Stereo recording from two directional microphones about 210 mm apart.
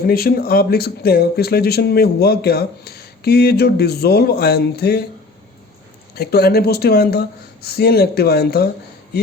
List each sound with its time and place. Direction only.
0.1 s speech: 45° left (ahead or behind)
6.1 s speech: 50° left (ahead or behind)